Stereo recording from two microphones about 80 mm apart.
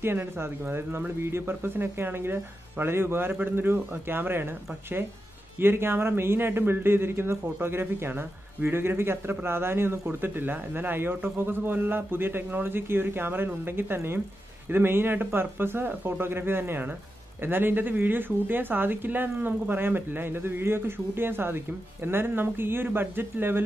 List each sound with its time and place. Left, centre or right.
0.0 s speech: right
5.6 s speech: right